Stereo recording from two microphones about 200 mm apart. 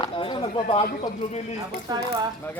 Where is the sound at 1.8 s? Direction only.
20° right (ahead or behind).